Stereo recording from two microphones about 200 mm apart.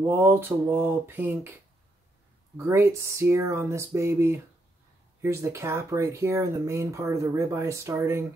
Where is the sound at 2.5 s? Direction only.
15° right (ahead or behind).